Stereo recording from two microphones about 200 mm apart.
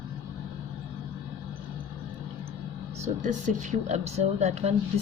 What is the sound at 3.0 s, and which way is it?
Speech, 40° right (ahead or behind).